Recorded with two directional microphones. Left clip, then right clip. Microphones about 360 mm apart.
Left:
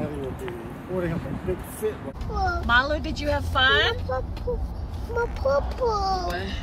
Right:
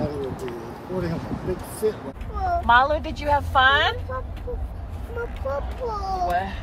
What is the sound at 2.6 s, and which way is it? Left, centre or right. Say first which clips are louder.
Speech: right 5 dB; centre.